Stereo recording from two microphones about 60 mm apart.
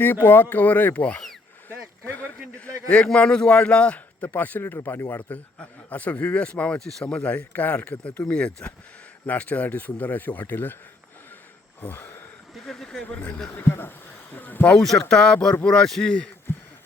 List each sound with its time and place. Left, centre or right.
0.0 s a man's voice: left
5.1 s a man's voice: left
7.3 s a man's voice: left
11.8 s a sound: left
12.5 s speech: centre
13.1 s a man's voice: left
13.6 s speech: left
14.3 s a sound: left
15.1 s speech: centre